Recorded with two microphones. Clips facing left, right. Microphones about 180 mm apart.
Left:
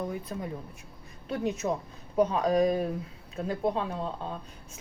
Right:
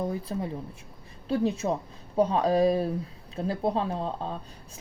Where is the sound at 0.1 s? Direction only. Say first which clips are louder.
Right 3 dB; 30° right (ahead or behind).